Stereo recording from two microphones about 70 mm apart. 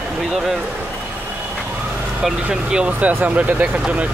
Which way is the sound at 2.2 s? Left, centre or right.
Centre.